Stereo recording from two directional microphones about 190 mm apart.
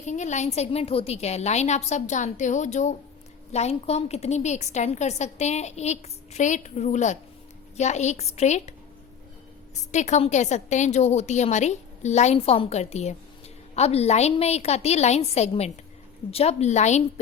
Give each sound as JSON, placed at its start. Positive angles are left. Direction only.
{"t": 0.0, "sound": "a woman's voice", "side_deg": 40}
{"t": 9.9, "sound": "a woman's voice", "side_deg": 35}